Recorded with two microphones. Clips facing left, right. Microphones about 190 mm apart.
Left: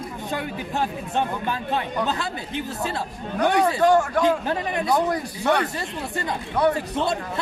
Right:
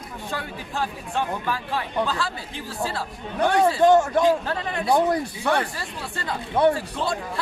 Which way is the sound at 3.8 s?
25° right (ahead or behind).